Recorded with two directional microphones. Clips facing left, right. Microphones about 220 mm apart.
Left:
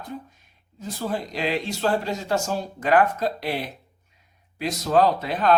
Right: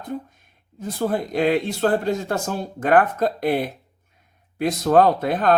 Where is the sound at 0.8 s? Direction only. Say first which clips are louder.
Right 5 dB; 55° right (ahead or behind).